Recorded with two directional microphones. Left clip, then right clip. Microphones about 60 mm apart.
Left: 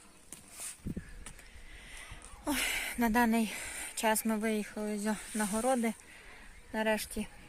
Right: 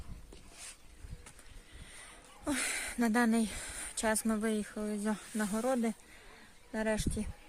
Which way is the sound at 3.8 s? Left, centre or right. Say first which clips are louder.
Left 2 dB; right.